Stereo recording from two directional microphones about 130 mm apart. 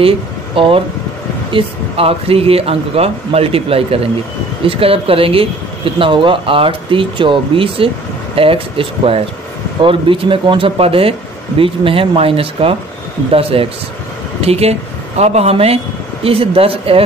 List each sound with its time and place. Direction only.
0.6 s speech: 45° right (ahead or behind)